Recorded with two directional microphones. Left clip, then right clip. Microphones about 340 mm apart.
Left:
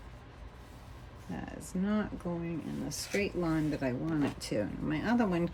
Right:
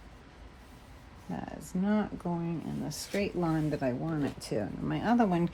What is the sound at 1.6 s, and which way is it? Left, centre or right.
Speech, centre.